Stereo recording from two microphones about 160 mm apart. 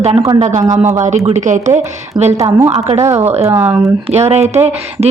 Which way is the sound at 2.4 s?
20° right (ahead or behind).